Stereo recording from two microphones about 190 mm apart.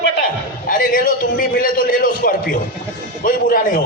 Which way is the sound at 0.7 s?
45° left (ahead or behind).